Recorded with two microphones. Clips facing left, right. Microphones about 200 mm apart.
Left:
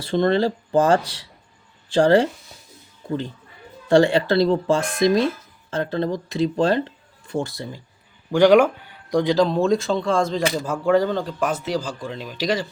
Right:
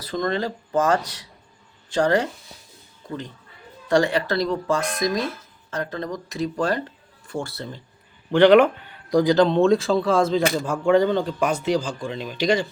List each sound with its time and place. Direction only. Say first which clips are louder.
0.0 s speech: left 6 dB; 30° left (ahead or behind); by 7.8 s 15° left (ahead or behind)
8.5 s speech: even; centre (ahead or behind)